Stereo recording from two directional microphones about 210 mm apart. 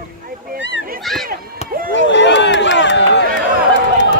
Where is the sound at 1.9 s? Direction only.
60° left (ahead or behind).